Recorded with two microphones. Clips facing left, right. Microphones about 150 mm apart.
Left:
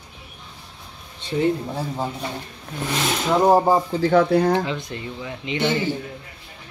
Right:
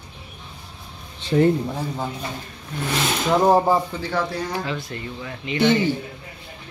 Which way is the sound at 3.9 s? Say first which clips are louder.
Left 9 dB; 50° left (ahead or behind).